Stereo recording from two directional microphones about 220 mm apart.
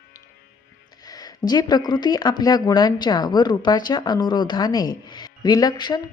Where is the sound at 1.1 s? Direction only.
15° left (ahead or behind).